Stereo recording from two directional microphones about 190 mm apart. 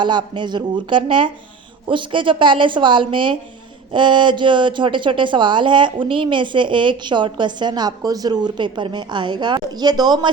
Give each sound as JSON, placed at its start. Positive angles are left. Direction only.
{"t": 0.0, "sound": "a woman's voice", "side_deg": -25}